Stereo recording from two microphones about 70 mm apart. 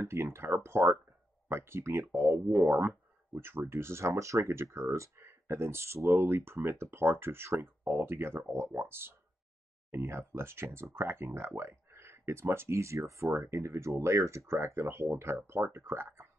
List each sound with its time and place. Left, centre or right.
0.0 s speech: right